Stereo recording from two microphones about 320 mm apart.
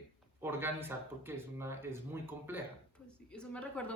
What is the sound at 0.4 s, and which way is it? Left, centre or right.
Speech, centre.